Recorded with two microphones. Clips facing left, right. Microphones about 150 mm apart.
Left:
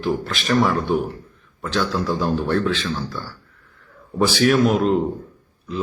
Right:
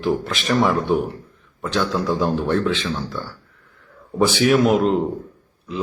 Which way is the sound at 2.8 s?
Centre (ahead or behind).